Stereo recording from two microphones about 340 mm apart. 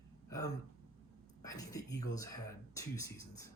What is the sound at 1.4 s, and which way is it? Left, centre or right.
Speech, centre.